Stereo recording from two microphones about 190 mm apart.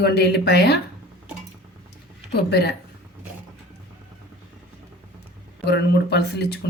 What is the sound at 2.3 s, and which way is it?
Speech, 60° left (ahead or behind).